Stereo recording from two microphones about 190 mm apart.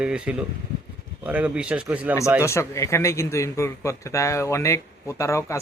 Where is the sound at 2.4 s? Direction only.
15° left (ahead or behind).